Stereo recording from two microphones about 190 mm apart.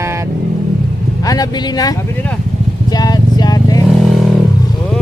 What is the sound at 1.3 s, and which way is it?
Speech, 20° left (ahead or behind).